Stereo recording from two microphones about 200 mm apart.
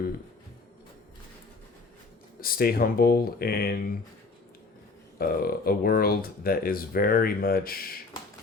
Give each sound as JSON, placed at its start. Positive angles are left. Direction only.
{"t": 2.4, "sound": "speech", "side_deg": 45}
{"t": 5.1, "sound": "speech", "side_deg": 50}